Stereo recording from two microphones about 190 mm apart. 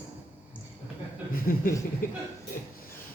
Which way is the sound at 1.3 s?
50° left (ahead or behind).